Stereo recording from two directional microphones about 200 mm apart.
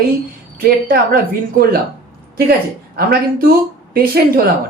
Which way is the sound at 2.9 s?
45° right (ahead or behind).